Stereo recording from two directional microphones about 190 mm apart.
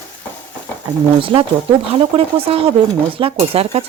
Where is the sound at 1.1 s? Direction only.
30° right (ahead or behind).